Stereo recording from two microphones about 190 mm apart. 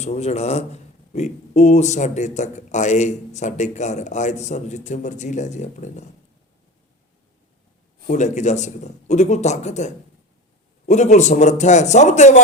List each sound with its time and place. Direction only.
0.0 s a man's voice: 35° left (ahead or behind)
8.0 s a man's voice: 40° left (ahead or behind)